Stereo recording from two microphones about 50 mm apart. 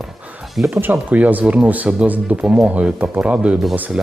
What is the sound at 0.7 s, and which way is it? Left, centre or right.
Speech, right.